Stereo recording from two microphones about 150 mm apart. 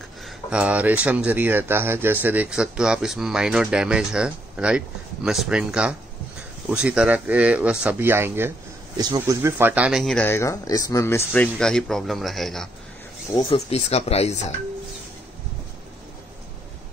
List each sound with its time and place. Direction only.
0.2 s speech: 5° right (ahead or behind)
10.1 s speech: 15° left (ahead or behind)
13.4 s speech: 40° left (ahead or behind)